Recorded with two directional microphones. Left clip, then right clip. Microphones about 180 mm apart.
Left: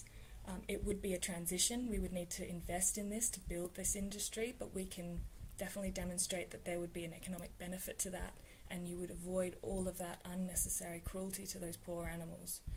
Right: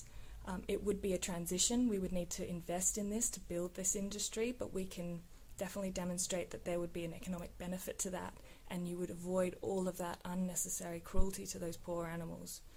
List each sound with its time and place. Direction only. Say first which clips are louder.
0.4 s speech: right 4 dB; 40° right (ahead or behind)